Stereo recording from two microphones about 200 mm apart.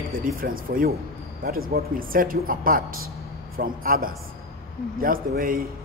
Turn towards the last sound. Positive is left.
turn(degrees=-45)  # may be behind; listen again after turning